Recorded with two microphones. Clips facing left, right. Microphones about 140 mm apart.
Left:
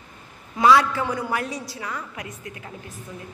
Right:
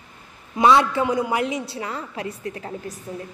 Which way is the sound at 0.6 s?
25° right (ahead or behind).